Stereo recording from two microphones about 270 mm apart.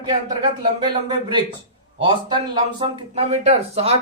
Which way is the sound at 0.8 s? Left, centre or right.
Centre.